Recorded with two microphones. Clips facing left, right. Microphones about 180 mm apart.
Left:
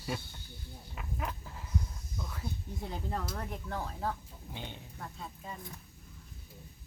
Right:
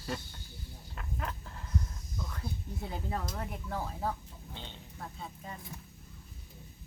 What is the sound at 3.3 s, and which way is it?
Speech, 5° right (ahead or behind).